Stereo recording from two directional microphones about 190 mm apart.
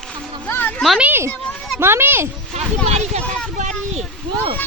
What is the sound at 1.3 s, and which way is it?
Children playing, 5° left (ahead or behind).